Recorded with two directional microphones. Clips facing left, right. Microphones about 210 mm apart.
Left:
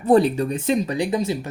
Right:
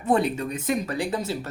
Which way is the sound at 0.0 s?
35° left (ahead or behind).